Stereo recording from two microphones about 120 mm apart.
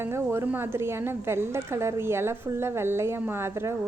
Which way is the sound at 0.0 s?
20° right (ahead or behind).